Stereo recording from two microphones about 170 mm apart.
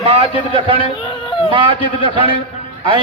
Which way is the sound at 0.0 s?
35° right (ahead or behind).